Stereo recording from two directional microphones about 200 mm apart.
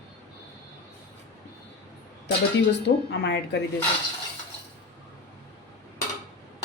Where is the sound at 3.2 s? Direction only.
60° left (ahead or behind).